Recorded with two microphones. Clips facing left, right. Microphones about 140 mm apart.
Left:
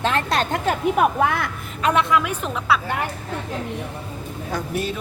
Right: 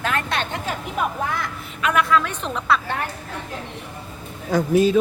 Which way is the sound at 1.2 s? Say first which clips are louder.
Left 5 dB; 65° left (ahead or behind).